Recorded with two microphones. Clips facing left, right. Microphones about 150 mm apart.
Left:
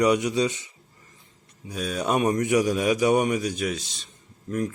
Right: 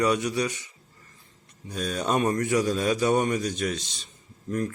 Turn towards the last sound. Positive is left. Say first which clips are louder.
# left 1 dB
turn(degrees=5)  # may be behind; listen again after turning